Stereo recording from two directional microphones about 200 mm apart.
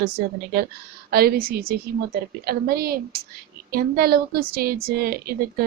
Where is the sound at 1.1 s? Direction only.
50° right (ahead or behind).